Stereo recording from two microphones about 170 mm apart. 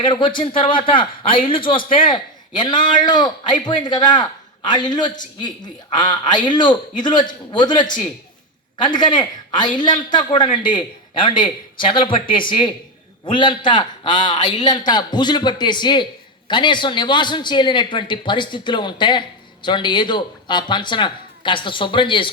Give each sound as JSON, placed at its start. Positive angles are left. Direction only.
{"t": 0.0, "sound": "a man's voice", "side_deg": 25}
{"t": 9.0, "sound": "a man's voice", "side_deg": 25}